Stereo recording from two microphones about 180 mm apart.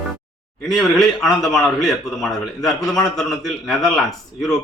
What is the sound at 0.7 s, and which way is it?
A man's voice, centre (ahead or behind).